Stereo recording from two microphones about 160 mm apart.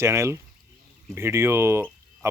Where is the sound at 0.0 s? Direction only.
20° right (ahead or behind).